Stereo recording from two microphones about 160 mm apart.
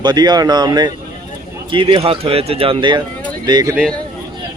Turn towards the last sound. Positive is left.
turn(degrees=-25)  # may be behind; listen again after turning